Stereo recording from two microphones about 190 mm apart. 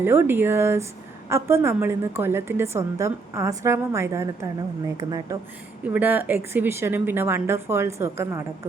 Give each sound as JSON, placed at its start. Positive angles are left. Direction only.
{"t": 0.0, "sound": "a woman's voice", "side_deg": -10}